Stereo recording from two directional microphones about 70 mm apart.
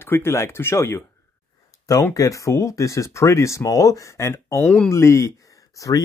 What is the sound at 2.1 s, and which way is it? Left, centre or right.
Speech, left.